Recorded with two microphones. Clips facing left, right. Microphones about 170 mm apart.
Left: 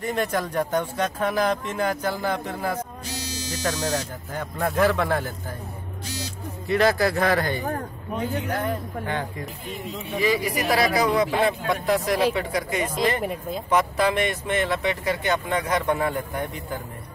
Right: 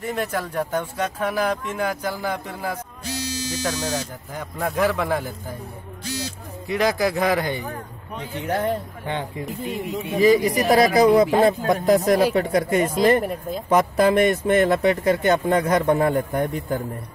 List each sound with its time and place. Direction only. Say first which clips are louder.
0.0 s speech: left 1 dB; 5° right (ahead or behind)
6.7 s speech: left 1 dB; 15° right (ahead or behind)
8.4 s speech: right 3 dB; 25° right (ahead or behind)
10.2 s speech: right 7 dB; 45° right (ahead or behind)
13.2 s speech: right 1 dB; centre (ahead or behind)
13.7 s speech: right 4 dB; 45° right (ahead or behind)